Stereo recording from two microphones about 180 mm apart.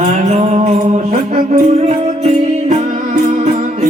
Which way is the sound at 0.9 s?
35° right (ahead or behind).